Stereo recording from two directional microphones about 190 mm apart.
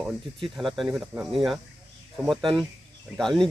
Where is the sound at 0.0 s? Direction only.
Centre (ahead or behind).